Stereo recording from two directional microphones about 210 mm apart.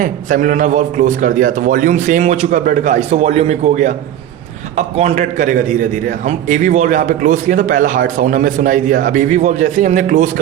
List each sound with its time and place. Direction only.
0.0 s a man's voice: 40° right (ahead or behind)